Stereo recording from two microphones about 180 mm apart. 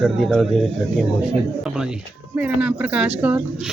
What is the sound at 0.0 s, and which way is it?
Speech, centre (ahead or behind).